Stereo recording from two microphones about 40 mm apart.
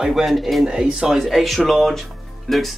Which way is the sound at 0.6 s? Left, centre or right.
Right.